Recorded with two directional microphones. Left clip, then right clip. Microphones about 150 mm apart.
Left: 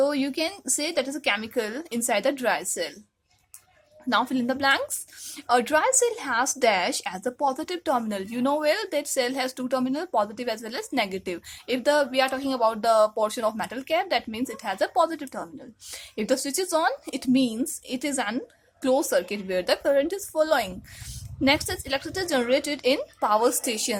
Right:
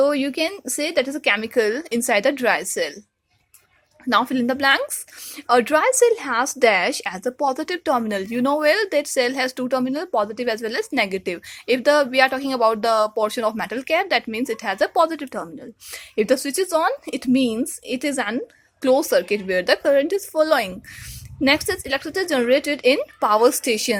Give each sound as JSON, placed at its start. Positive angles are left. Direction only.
{"t": 0.0, "sound": "speech", "side_deg": -40}
{"t": 4.1, "sound": "speech", "side_deg": -35}